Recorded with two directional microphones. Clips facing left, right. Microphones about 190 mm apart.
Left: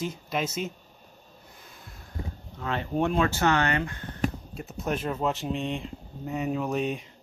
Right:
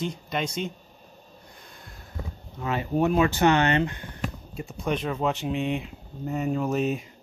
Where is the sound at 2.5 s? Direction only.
10° right (ahead or behind).